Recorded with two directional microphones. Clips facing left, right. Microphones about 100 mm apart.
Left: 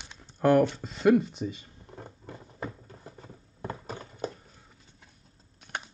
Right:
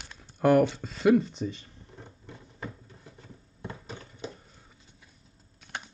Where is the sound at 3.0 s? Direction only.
40° left (ahead or behind).